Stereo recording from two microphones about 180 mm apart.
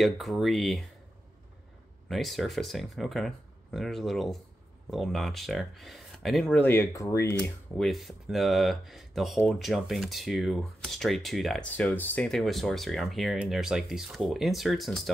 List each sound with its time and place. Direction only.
0.0 s speech: centre (ahead or behind)
2.0 s speech: centre (ahead or behind)
6.7 s speech: 15° left (ahead or behind)
7.7 s speech: centre (ahead or behind)